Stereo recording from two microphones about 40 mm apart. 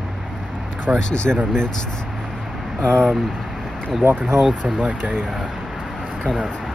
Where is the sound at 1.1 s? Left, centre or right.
Left.